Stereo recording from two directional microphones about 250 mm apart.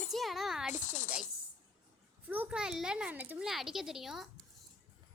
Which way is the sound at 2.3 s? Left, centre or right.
Centre.